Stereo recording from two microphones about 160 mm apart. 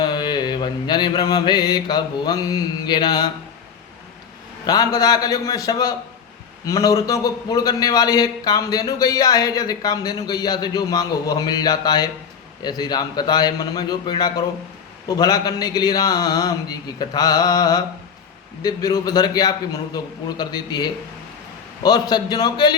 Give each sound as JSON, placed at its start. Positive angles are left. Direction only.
{"t": 0.0, "sound": "mantra", "side_deg": 25}
{"t": 4.6, "sound": "a man's voice", "side_deg": 25}